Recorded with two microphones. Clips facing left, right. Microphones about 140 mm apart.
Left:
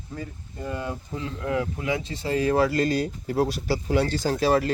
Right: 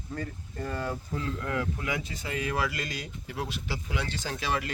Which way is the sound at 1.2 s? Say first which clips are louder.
Left 6 dB; 25° left (ahead or behind).